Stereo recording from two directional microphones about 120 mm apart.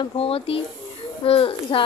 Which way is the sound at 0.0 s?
50° left (ahead or behind).